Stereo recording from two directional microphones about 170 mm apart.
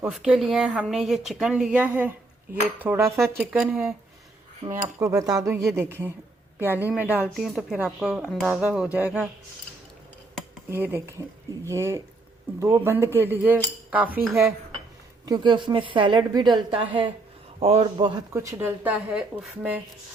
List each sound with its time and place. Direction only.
0.1 s speech: 5° right (ahead or behind)
10.7 s speech: 15° right (ahead or behind)
15.3 s a woman's voice: 30° right (ahead or behind)
18.3 s speech: 15° right (ahead or behind)